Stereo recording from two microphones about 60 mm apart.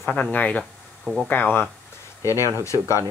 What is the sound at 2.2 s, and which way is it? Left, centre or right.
Speech, left.